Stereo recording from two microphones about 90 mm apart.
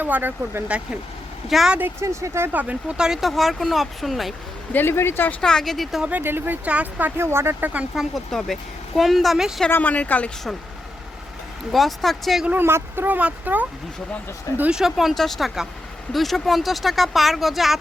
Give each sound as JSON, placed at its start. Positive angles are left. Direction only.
{"t": 0.0, "sound": "speech", "side_deg": -20}
{"t": 1.5, "sound": "speech", "side_deg": 0}
{"t": 2.0, "sound": "speech", "side_deg": -30}
{"t": 3.0, "sound": "speech", "side_deg": -5}
{"t": 4.7, "sound": "speech", "side_deg": 25}
{"t": 5.4, "sound": "speech", "side_deg": 5}
{"t": 6.1, "sound": "speech", "side_deg": -20}
{"t": 7.2, "sound": "speech", "side_deg": -30}
{"t": 7.9, "sound": "speech", "side_deg": 5}
{"t": 9.6, "sound": "speech", "side_deg": 20}
{"t": 11.7, "sound": "speech", "side_deg": 0}
{"t": 12.5, "sound": "speech", "side_deg": -25}
{"t": 14.7, "sound": "speech", "side_deg": -5}